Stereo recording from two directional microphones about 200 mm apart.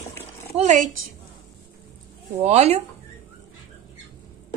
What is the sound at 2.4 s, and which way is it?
Speech, 30° right (ahead or behind).